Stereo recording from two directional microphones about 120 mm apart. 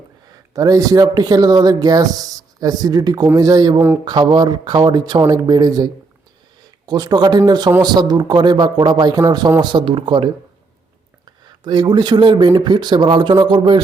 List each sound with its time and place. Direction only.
0.5 s speech: 30° right (ahead or behind)
9.6 s speech: 45° right (ahead or behind)
11.3 s speech: 40° right (ahead or behind)